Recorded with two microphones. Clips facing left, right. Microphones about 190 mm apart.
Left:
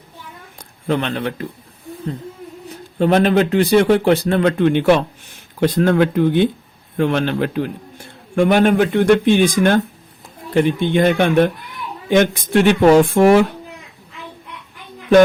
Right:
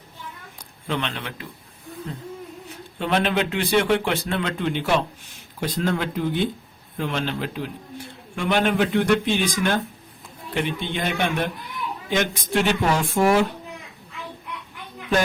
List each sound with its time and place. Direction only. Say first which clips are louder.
0.9 s speech: left 8 dB; 40° left (ahead or behind)
3.0 s a man's voice: left 8 dB; 40° left (ahead or behind)
4.5 s speech: left 7 dB; 60° left (ahead or behind)
8.4 s speech: left 8 dB; 50° left (ahead or behind)